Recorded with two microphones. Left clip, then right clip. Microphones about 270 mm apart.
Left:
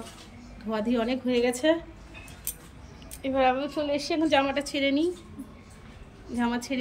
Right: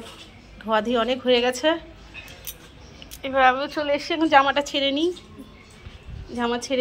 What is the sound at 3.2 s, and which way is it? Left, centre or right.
A woman's voice, centre.